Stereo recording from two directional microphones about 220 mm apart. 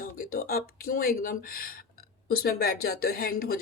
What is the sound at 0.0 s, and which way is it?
Speech, 40° left (ahead or behind).